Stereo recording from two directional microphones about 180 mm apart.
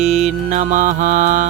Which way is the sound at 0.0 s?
40° right (ahead or behind).